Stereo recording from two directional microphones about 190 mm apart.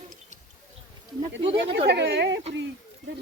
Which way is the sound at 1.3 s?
70° right (ahead or behind).